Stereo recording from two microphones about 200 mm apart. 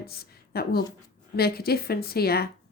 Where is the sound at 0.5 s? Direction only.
50° left (ahead or behind).